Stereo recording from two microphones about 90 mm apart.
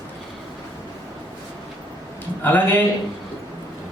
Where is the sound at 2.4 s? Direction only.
20° left (ahead or behind).